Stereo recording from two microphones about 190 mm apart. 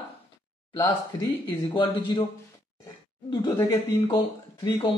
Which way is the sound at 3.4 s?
25° left (ahead or behind).